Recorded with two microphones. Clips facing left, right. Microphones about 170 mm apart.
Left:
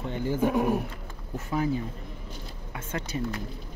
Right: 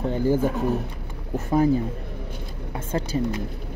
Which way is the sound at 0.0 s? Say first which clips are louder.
Right 8 dB; 40° right (ahead or behind).